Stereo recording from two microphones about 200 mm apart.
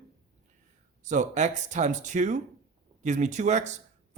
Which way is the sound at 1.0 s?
35° right (ahead or behind).